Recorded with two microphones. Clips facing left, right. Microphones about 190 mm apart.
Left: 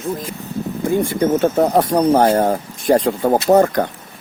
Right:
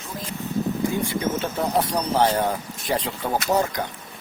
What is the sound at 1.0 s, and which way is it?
Speech, 50° left (ahead or behind).